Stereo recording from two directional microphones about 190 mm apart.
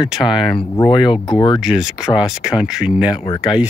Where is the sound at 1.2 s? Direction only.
25° left (ahead or behind).